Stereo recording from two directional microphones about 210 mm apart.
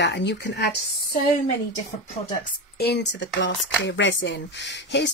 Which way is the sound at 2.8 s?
55° left (ahead or behind).